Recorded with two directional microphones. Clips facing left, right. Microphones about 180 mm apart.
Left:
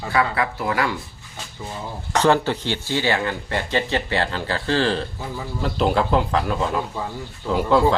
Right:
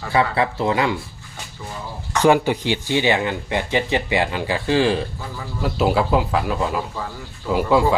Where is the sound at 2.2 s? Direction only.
15° right (ahead or behind).